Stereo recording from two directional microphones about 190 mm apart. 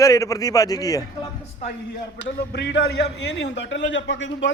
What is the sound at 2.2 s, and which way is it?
A man's voice, 65° left (ahead or behind).